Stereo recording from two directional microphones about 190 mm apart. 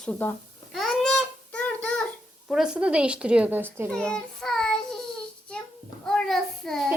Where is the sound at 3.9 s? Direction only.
5° left (ahead or behind).